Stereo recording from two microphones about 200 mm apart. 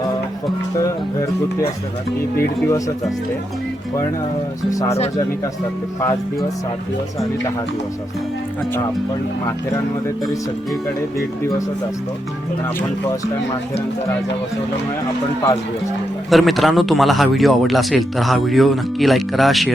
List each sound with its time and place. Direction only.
0.8 s speech: 15° left (ahead or behind)
4.7 s speech: 15° left (ahead or behind)
16.3 s speech: centre (ahead or behind)